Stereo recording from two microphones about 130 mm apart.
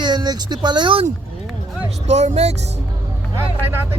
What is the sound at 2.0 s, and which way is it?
Speech, 60° right (ahead or behind).